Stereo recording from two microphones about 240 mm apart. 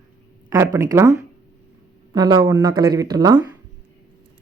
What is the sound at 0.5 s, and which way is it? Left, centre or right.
Speech, centre.